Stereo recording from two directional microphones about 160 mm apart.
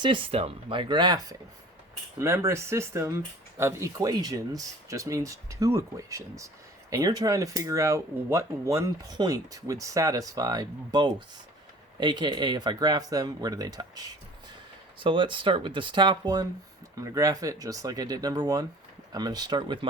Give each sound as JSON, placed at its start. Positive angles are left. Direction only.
{"t": 0.0, "sound": "speech", "side_deg": -30}